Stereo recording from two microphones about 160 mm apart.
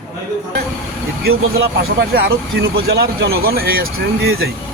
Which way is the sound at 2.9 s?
75° right (ahead or behind).